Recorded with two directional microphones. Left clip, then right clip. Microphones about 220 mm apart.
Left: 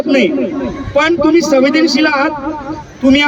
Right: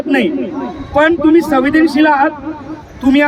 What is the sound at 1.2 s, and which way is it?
A man's voice, 50° left (ahead or behind).